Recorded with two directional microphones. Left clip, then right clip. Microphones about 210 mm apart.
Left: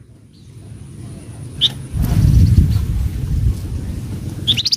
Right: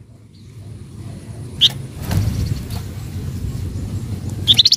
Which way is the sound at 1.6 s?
25° right (ahead or behind).